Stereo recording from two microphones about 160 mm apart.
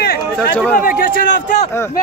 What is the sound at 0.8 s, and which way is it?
Speech, 60° left (ahead or behind).